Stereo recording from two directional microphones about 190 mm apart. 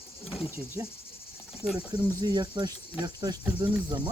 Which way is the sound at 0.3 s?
5° right (ahead or behind).